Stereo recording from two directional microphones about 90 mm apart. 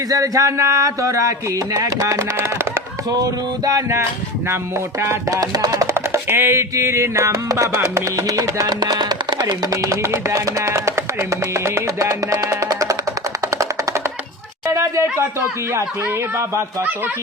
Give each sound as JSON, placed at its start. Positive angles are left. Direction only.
{"t": 0.1, "sound": "music", "side_deg": -40}
{"t": 3.1, "sound": "speech", "side_deg": -45}
{"t": 4.9, "sound": "speech", "side_deg": -35}
{"t": 5.9, "sound": "music", "side_deg": -30}
{"t": 8.8, "sound": "speech", "side_deg": -50}
{"t": 14.7, "sound": "music", "side_deg": -35}